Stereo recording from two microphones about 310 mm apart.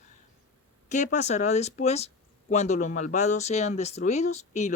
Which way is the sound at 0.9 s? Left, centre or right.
Left.